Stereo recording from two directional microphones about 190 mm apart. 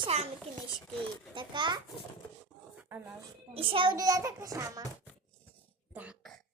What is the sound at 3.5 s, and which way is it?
A child's voice, 30° right (ahead or behind).